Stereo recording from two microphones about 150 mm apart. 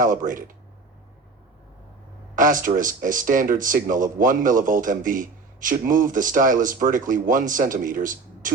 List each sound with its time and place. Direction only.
0.0 s speech: 60° right (ahead or behind)
2.3 s speech: 60° right (ahead or behind)